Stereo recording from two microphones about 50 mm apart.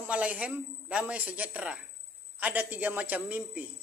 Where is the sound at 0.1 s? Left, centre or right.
Right.